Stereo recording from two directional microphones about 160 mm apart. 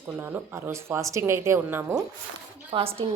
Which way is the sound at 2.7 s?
35° right (ahead or behind).